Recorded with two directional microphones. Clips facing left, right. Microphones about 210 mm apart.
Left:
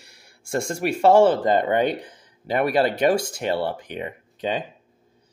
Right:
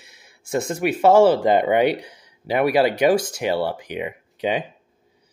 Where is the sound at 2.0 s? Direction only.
50° left (ahead or behind).